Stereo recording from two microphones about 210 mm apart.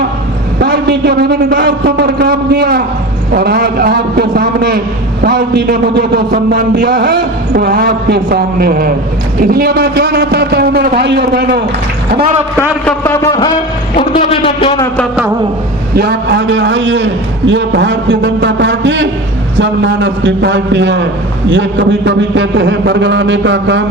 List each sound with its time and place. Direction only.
0.6 s a man's voice: 50° right (ahead or behind)
13.2 s a man's voice: 20° left (ahead or behind)
16.0 s a man's voice: 50° right (ahead or behind)